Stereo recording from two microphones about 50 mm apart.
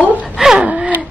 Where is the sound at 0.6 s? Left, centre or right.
Right.